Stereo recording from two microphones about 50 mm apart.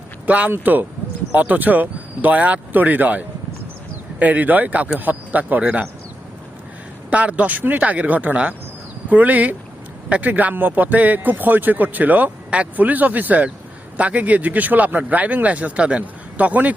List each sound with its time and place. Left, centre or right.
0.3 s speech: right
7.1 s a man's voice: right